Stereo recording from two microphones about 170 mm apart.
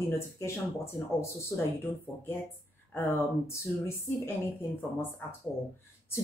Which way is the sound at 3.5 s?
15° left (ahead or behind).